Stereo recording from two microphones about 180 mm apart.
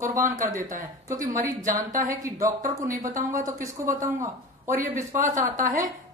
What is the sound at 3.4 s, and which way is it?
Speech, 15° right (ahead or behind).